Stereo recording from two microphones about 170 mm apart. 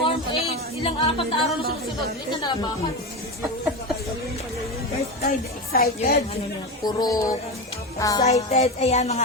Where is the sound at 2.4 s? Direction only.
25° left (ahead or behind).